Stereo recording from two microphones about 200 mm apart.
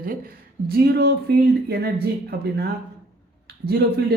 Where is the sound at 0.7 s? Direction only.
55° right (ahead or behind).